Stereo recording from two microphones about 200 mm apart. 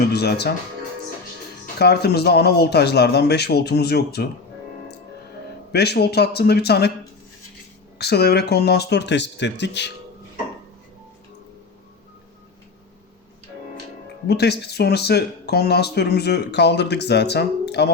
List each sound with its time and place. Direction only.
0.0 s speech: 55° left (ahead or behind)
1.8 s speech: 55° left (ahead or behind)
5.7 s speech: 55° left (ahead or behind)
7.9 s speech: 55° left (ahead or behind)
14.3 s speech: 55° left (ahead or behind)